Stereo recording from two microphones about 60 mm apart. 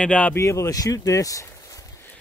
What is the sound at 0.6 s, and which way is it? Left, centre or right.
Speech, left.